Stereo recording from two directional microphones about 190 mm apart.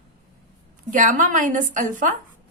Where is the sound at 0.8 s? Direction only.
45° right (ahead or behind).